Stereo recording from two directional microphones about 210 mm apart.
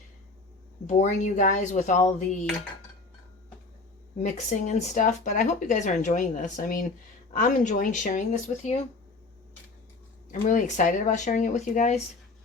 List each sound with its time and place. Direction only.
0.9 s speech: 35° left (ahead or behind)
4.2 s speech: 35° left (ahead or behind)
10.4 s speech: 35° left (ahead or behind)